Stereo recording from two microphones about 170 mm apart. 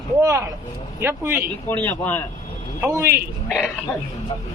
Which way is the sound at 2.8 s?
15° right (ahead or behind).